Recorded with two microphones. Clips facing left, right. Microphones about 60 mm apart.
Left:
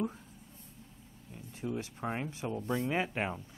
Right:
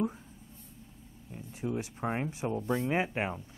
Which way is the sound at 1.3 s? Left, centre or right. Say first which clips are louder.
Right 3 dB; centre.